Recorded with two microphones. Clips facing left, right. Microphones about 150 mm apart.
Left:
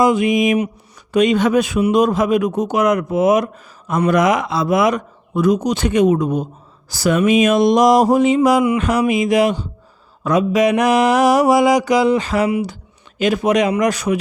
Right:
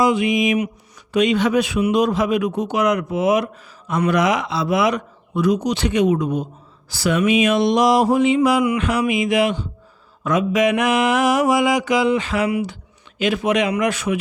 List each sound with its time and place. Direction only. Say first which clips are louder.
0.0 s a man's voice: left 3 dB; 45° left (ahead or behind)
8.8 s mantra: left 3 dB; 40° left (ahead or behind)